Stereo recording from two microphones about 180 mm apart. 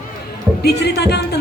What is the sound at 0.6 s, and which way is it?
Speech, 65° left (ahead or behind).